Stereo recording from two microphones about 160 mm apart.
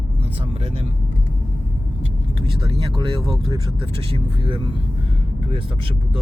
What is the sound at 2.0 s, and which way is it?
Vehicle, 35° right (ahead or behind).